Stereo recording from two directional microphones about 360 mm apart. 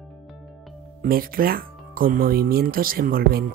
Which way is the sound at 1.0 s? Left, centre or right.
Right.